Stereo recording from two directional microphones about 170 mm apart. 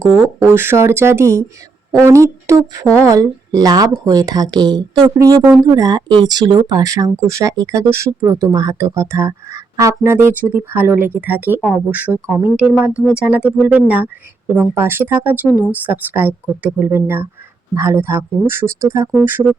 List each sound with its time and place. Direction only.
0.0 s speech: 15° right (ahead or behind)